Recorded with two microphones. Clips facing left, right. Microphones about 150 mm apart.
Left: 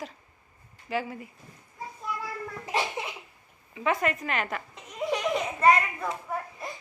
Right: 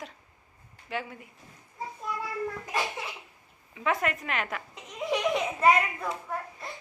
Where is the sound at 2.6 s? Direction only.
25° left (ahead or behind).